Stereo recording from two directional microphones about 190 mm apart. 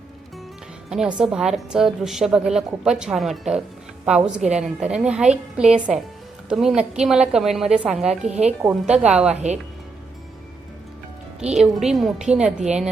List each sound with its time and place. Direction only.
0.9 s a woman's voice: 5° right (ahead or behind)
8.3 s speech: 35° right (ahead or behind)
8.6 s a woman's voice: 5° right (ahead or behind)
11.5 s a woman's voice: 5° right (ahead or behind)